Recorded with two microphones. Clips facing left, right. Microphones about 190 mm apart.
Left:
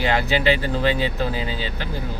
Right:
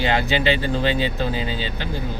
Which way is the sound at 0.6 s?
25° right (ahead or behind).